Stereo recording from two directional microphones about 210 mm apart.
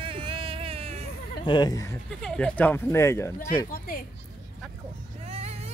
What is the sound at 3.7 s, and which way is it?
Speech, 45° left (ahead or behind).